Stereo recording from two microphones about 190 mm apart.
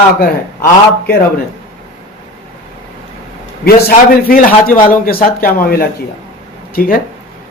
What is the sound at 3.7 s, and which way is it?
A man's voice, 50° left (ahead or behind).